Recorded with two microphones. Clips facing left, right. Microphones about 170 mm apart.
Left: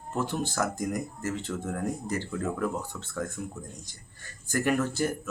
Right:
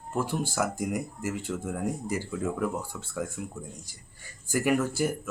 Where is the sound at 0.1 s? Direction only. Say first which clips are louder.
Right 1 dB; 10° right (ahead or behind).